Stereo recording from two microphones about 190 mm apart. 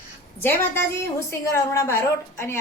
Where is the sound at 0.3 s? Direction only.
10° left (ahead or behind).